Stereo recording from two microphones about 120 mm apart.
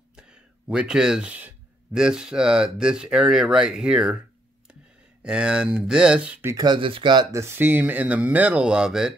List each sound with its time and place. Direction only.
0.1 s a sound: 5° right (ahead or behind)
2.0 s speech: 5° right (ahead or behind)
5.2 s speech: 5° right (ahead or behind)
6.4 s speech: 35° right (ahead or behind)
7.2 s speech: 20° right (ahead or behind); by 9.1 s 5° right (ahead or behind)